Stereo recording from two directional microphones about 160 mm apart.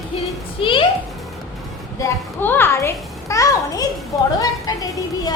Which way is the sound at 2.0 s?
15° left (ahead or behind).